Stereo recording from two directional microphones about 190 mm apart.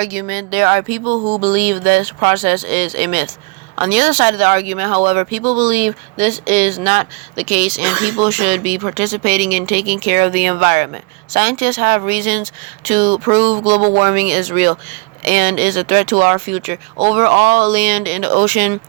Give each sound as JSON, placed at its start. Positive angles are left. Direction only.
{"t": 0.0, "sound": "speech", "side_deg": -40}